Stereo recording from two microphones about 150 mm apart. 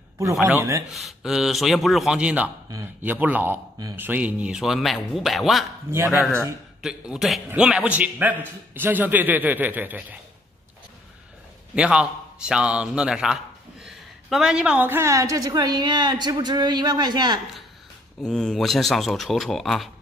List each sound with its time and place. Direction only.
0.2 s a man's voice: 20° right (ahead or behind)
0.9 s a man's voice: centre (ahead or behind)
11.7 s a man's voice: 5° right (ahead or behind); by 17.4 s 30° right (ahead or behind)
18.2 s a man's voice: 5° left (ahead or behind)